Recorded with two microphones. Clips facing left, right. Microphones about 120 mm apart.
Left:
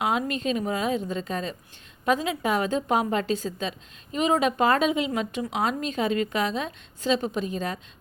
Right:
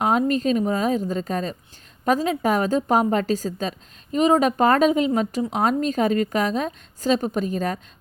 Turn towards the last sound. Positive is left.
turn(degrees=-45)  # may be behind; listen again after turning